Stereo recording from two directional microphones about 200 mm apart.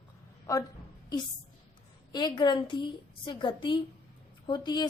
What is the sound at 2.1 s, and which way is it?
A woman's voice, 20° left (ahead or behind).